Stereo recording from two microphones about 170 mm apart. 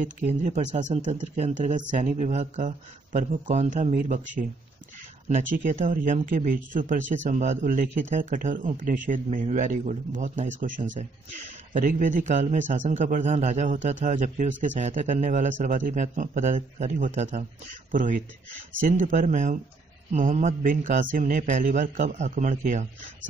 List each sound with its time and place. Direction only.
0.0 s speech: 45° right (ahead or behind)
5.3 s speech: 50° right (ahead or behind)
11.7 s speech: 50° right (ahead or behind)